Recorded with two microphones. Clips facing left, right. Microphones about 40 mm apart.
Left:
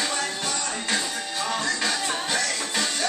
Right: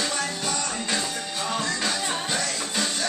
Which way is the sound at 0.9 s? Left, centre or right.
Centre.